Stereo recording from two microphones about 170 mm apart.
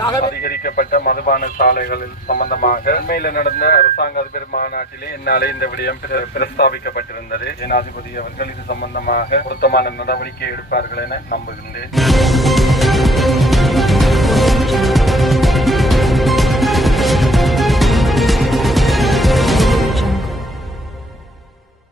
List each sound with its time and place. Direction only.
0.0 s a sound: 25° left (ahead or behind)
0.3 s speech: 60° left (ahead or behind)
11.9 s music: centre (ahead or behind)